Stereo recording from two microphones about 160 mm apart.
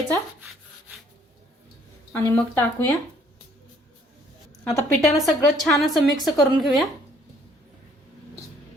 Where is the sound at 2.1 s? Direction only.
15° left (ahead or behind).